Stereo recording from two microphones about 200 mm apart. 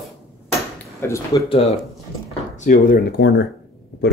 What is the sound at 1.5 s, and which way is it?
Speech, 30° left (ahead or behind).